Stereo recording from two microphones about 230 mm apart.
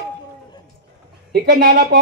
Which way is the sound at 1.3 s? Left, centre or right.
Right.